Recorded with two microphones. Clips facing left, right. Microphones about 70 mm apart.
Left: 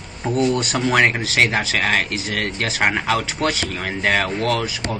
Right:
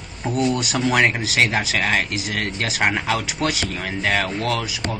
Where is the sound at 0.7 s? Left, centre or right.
Centre.